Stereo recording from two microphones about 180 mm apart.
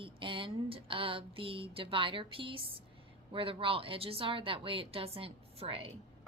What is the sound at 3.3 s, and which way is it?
Speech, 30° right (ahead or behind).